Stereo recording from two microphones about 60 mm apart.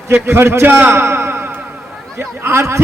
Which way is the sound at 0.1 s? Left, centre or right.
Right.